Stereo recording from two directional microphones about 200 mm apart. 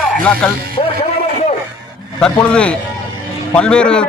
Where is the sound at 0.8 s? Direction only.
30° left (ahead or behind).